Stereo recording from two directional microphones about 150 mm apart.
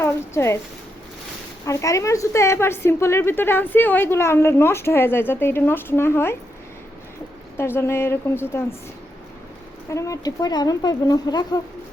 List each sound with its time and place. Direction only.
0.0 s a woman's voice: 15° left (ahead or behind)
1.6 s a woman's voice: 20° left (ahead or behind)
7.5 s a woman's voice: 15° left (ahead or behind)
9.9 s speech: 25° left (ahead or behind)